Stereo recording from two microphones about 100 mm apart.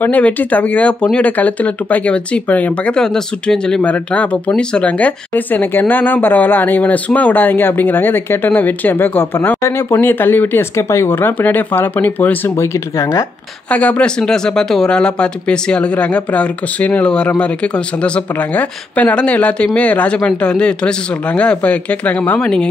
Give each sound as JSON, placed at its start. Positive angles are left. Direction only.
{"t": 0.0, "sound": "speech", "side_deg": 15}
{"t": 13.7, "sound": "speech", "side_deg": 15}